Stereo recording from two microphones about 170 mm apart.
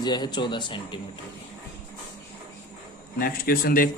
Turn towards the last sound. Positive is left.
turn(degrees=60)  # may be behind; listen again after turning